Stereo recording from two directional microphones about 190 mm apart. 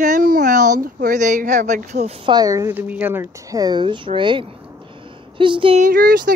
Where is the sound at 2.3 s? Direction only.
20° right (ahead or behind).